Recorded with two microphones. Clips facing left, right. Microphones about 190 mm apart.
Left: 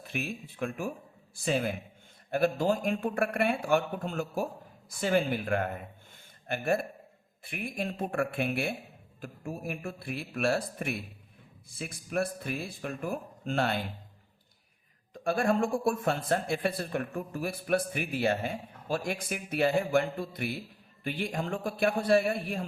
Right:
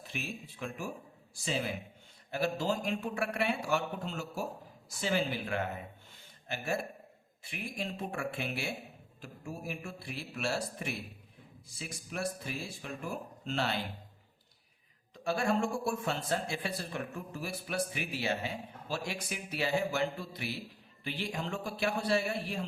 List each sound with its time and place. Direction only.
0.1 s speech: 60° left (ahead or behind)
15.1 s speech: 50° left (ahead or behind)